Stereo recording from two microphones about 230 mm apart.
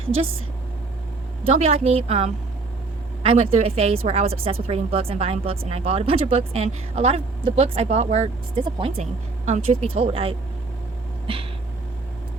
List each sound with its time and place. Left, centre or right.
1.5 s a woman's voice: right